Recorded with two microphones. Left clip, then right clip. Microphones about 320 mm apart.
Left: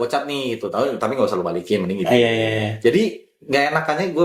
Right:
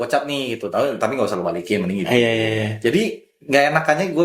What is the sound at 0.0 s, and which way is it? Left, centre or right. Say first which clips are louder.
Speech: right 1 dB; right.